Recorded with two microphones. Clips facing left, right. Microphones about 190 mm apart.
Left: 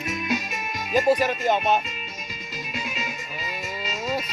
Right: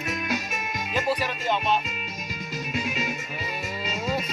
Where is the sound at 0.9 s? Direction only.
45° left (ahead or behind).